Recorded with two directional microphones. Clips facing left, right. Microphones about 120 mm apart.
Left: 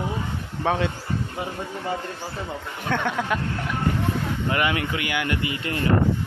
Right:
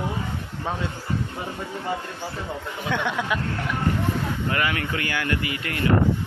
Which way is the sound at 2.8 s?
50° left (ahead or behind).